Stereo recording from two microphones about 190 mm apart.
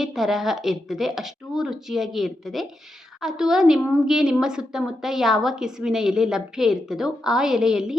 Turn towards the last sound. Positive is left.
turn(degrees=-5)  # may be behind; listen again after turning